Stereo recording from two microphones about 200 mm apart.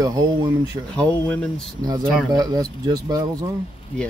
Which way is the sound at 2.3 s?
20° right (ahead or behind).